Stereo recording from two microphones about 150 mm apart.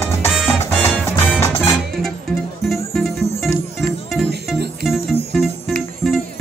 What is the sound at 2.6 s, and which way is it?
Music, centre (ahead or behind).